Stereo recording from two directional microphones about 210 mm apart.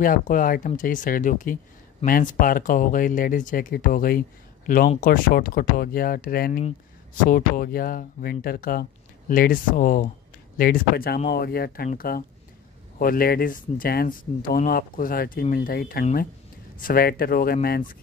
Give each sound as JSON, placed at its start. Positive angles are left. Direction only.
{"t": 0.0, "sound": "speech", "side_deg": 40}